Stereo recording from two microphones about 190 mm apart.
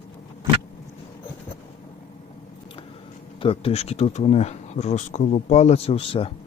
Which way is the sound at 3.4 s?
30° left (ahead or behind).